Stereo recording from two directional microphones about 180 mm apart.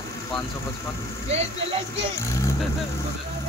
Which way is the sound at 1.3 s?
35° right (ahead or behind).